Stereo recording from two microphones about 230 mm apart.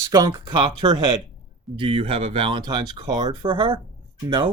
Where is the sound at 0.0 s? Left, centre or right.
Centre.